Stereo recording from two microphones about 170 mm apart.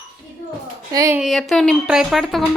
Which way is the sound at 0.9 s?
20° right (ahead or behind).